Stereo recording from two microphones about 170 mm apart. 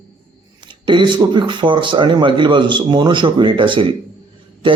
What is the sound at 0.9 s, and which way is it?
A man's voice, 30° right (ahead or behind).